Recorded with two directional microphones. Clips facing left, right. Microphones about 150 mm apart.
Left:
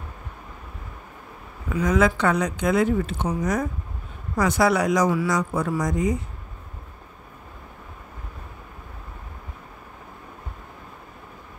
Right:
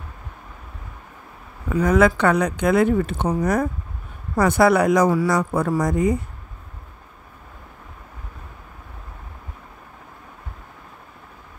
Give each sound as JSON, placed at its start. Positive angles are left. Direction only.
{"t": 1.8, "sound": "speech", "side_deg": -60}